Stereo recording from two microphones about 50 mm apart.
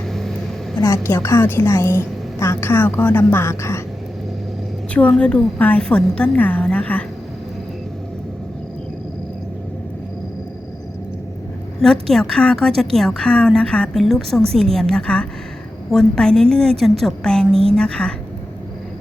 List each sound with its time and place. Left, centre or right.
0.1 s vehicle: centre
0.8 s a woman's voice: left
1.4 s a woman's voice: left
5.1 s a woman's voice: centre
5.5 s a woman's voice: left
5.8 s a woman's voice: left
6.3 s a woman's voice: left
11.8 s a woman's voice: centre
13.2 s a woman's voice: left
13.9 s a woman's voice: centre